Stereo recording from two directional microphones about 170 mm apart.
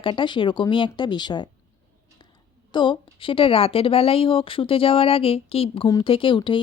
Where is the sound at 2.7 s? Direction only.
30° left (ahead or behind).